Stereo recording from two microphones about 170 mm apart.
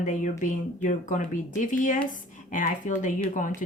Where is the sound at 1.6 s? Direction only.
50° left (ahead or behind).